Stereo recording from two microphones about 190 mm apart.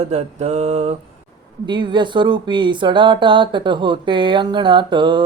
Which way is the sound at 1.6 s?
25° right (ahead or behind).